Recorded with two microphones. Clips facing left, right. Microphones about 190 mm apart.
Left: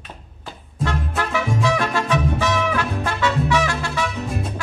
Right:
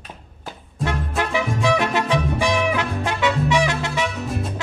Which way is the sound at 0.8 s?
15° right (ahead or behind).